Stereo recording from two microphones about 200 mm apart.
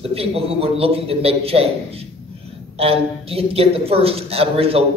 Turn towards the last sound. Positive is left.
turn(degrees=-30)  # may be behind; listen again after turning